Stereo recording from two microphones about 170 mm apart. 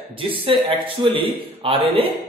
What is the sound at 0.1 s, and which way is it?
A man's voice, 30° right (ahead or behind).